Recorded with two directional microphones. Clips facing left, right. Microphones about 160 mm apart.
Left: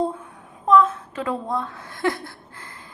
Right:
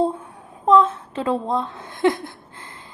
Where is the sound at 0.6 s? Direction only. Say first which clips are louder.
Right 1 dB; 25° right (ahead or behind).